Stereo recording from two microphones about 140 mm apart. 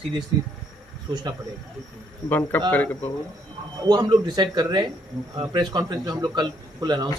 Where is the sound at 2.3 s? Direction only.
15° left (ahead or behind).